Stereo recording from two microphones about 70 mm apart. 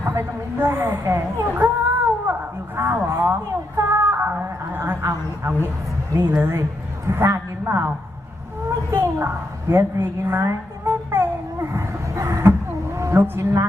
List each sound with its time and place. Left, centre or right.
0.2 s a woman's voice: right
3.8 s a sound: right
4.3 s a woman's voice: right
6.1 s a woman's voice: right
8.9 s a sound: right
13.4 s a woman's voice: right